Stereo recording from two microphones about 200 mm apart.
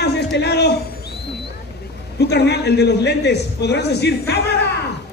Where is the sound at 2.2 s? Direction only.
55° left (ahead or behind).